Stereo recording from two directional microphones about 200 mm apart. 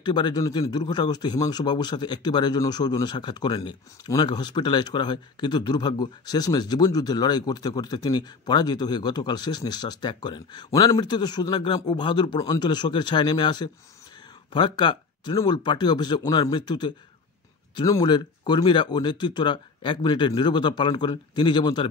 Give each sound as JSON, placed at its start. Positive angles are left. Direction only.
{"t": 0.0, "sound": "speech", "side_deg": 20}